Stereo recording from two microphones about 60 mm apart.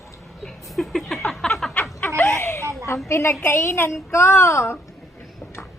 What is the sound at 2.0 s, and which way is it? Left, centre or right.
Laughter, left.